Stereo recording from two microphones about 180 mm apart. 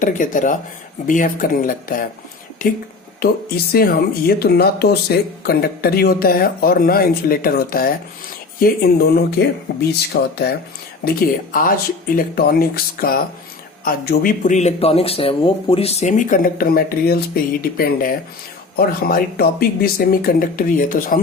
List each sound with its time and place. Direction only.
0.0 s speech: 45° left (ahead or behind)
3.7 s speech: 55° left (ahead or behind)